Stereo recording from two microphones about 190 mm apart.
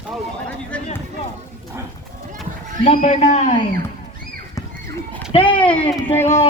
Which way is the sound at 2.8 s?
35° left (ahead or behind).